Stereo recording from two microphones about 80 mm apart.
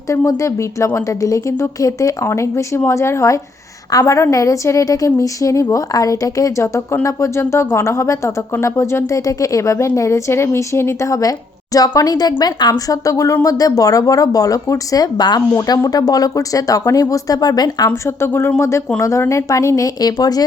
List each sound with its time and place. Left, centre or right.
0.3 s a woman's voice: left
17.8 s a woman's voice: left